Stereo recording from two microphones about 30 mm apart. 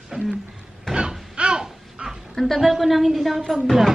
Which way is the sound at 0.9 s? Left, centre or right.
Centre.